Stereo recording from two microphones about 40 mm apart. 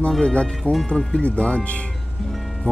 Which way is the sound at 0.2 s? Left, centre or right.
Left.